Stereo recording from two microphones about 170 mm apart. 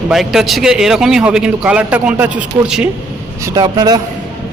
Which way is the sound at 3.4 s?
20° right (ahead or behind).